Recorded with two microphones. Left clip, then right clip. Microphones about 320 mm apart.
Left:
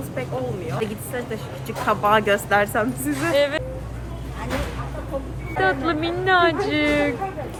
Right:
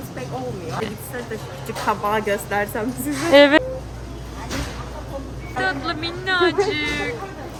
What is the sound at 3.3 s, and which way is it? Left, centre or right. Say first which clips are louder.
Speech: right 9 dB; right.